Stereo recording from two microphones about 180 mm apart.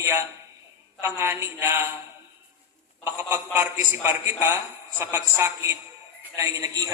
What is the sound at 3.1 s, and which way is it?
A man's voice, 10° right (ahead or behind).